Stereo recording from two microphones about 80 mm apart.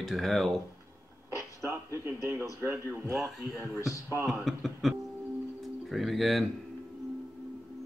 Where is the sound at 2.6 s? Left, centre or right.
Right.